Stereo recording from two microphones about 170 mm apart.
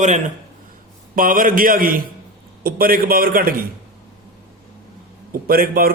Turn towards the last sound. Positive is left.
turn(degrees=-60)  # may be behind; listen again after turning